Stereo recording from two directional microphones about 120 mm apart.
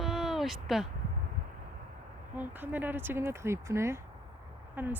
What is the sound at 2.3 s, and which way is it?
Speech, 15° right (ahead or behind).